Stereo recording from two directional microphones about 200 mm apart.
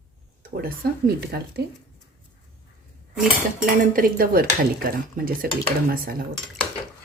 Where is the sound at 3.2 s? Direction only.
45° right (ahead or behind).